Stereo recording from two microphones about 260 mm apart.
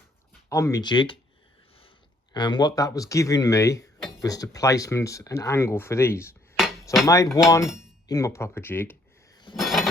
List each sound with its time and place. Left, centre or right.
0.5 s speech: centre
2.3 s speech: centre
9.6 s a sound: centre